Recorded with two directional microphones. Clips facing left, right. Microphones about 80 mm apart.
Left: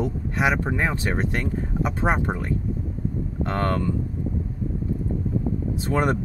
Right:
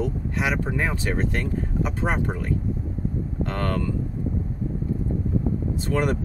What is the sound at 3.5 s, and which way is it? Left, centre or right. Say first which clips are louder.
Speech: left 3 dB; left.